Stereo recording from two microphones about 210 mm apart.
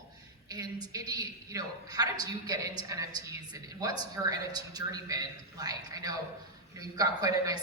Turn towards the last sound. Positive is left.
turn(degrees=-15)  # may be behind; listen again after turning